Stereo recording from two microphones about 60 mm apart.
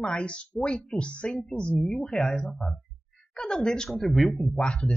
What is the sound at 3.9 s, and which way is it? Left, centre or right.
Speech, centre.